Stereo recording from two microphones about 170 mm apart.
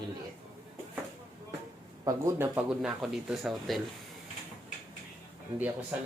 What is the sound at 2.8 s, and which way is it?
Speech, centre (ahead or behind).